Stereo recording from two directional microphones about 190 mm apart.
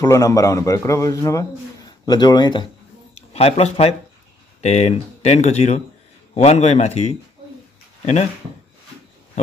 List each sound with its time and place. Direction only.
0.0 s a man's voice: 20° left (ahead or behind); by 8.3 s 35° left (ahead or behind)